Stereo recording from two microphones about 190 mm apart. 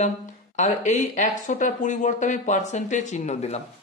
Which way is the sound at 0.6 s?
40° left (ahead or behind).